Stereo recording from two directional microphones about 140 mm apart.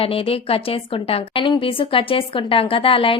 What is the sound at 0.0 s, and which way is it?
A woman's voice, 45° left (ahead or behind).